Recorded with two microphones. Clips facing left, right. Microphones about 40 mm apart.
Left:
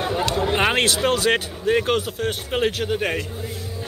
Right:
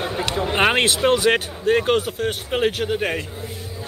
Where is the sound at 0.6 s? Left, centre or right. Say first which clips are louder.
Right 4 dB; centre.